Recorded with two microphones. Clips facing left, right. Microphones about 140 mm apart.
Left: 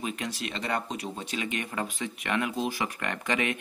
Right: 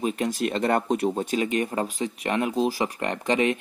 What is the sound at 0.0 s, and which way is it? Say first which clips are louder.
Speech: right 8 dB; 40° right (ahead or behind).